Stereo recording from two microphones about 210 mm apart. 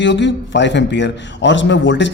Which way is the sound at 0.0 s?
60° left (ahead or behind).